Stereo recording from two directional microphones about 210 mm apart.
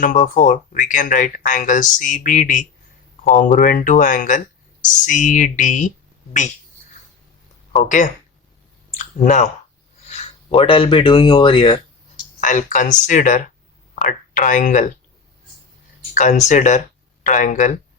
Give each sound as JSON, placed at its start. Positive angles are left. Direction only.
{"t": 0.0, "sound": "speech", "side_deg": 40}
{"t": 7.7, "sound": "speech", "side_deg": 35}
{"t": 12.4, "sound": "speech", "side_deg": 35}
{"t": 16.1, "sound": "speech", "side_deg": 35}